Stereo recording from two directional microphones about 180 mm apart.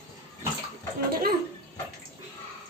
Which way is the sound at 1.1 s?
55° right (ahead or behind).